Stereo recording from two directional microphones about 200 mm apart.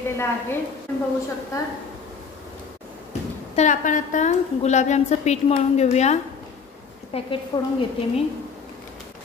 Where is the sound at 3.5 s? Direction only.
35° left (ahead or behind).